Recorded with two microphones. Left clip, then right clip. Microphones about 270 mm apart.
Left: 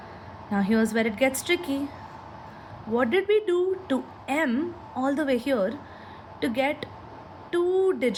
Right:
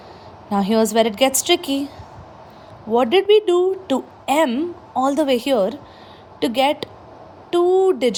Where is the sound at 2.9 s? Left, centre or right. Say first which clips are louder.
Right 8 dB; centre.